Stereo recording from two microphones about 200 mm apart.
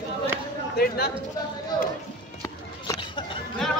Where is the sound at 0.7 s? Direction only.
50° left (ahead or behind).